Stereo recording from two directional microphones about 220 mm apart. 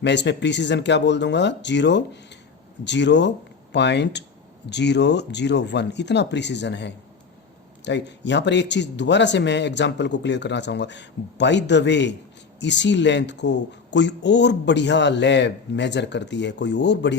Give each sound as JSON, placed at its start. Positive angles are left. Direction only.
{"t": 0.0, "sound": "speech", "side_deg": 55}